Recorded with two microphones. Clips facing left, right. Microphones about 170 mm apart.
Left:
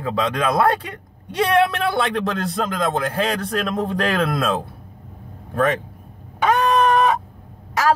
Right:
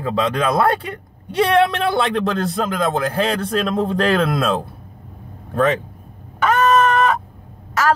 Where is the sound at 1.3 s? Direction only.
30° right (ahead or behind).